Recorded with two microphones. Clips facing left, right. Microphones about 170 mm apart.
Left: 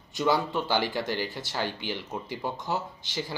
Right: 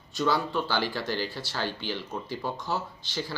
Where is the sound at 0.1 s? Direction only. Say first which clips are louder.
Left 1 dB; 15° left (ahead or behind).